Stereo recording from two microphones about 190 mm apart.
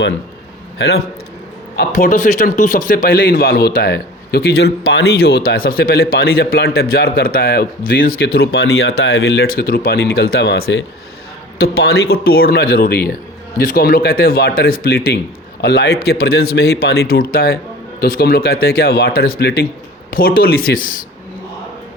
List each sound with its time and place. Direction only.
0.8 s a man's voice: 60° left (ahead or behind)
1.7 s a man's voice: 50° left (ahead or behind)